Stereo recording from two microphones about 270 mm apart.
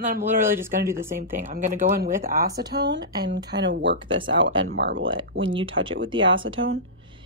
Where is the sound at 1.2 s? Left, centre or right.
Right.